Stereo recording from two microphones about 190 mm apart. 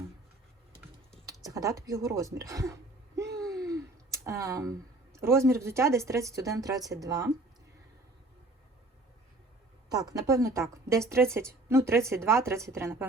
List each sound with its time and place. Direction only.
1.5 s a woman's voice: 15° right (ahead or behind)
3.2 s a sound: 15° right (ahead or behind)
3.6 s speech: 15° right (ahead or behind)
9.9 s a woman's voice: 20° right (ahead or behind)